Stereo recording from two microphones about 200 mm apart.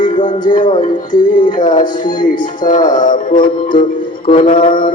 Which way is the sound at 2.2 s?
40° left (ahead or behind).